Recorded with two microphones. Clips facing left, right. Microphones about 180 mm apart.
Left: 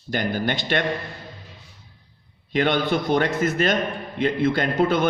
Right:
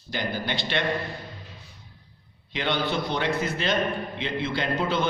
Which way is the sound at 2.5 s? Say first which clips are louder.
Left 6 dB; 50° left (ahead or behind).